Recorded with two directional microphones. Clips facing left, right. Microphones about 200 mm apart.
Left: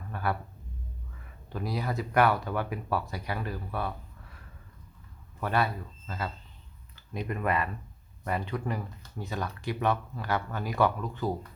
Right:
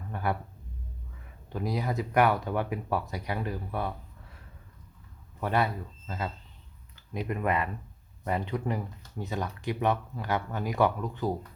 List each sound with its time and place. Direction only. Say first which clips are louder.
0.1 s speech: right 1 dB; 20° right (ahead or behind)
1.5 s speech: right 2 dB; 20° right (ahead or behind)
5.4 s speech: right 1 dB; 20° right (ahead or behind)